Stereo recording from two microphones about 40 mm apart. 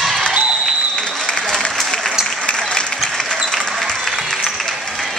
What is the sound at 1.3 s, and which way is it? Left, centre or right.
Applause, left.